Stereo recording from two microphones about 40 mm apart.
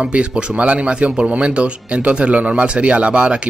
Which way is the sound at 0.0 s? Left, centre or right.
Right.